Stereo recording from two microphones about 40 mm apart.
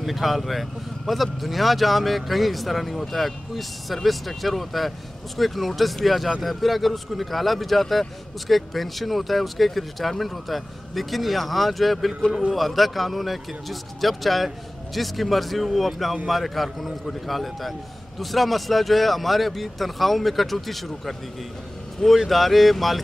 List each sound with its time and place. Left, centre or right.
0.0 s a man's voice: centre